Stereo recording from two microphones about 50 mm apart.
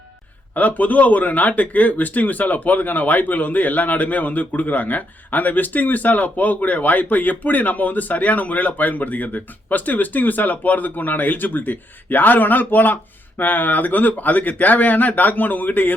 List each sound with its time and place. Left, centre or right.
0.5 s speech: left